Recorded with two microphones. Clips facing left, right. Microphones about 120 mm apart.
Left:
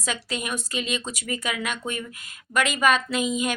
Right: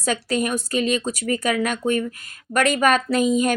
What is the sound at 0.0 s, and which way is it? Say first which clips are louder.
A woman's voice: right 8 dB; 45° right (ahead or behind).